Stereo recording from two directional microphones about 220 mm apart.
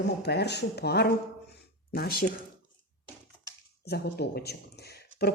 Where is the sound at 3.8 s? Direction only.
45° left (ahead or behind).